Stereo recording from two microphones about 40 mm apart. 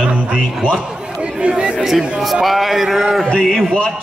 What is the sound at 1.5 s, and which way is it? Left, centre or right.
Speech, right.